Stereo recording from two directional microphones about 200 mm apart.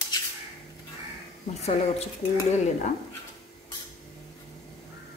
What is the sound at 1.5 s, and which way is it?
A woman's voice, 35° left (ahead or behind).